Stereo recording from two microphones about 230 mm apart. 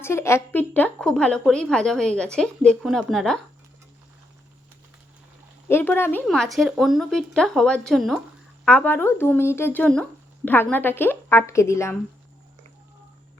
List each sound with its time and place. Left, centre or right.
0.0 s a woman's voice: centre
5.6 s a woman's voice: centre